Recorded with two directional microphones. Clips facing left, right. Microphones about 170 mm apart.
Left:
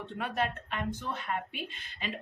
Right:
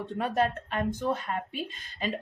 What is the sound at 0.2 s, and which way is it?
Speech, 40° right (ahead or behind).